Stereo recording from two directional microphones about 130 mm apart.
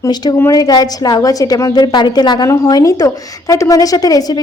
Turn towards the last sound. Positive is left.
turn(degrees=30)  # may be behind; listen again after turning